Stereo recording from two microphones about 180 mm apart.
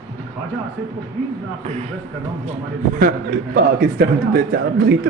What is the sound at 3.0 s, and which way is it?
A man's voice, 55° right (ahead or behind).